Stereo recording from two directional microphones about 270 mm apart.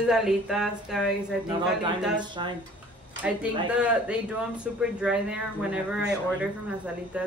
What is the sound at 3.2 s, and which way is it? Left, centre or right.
Speech, centre.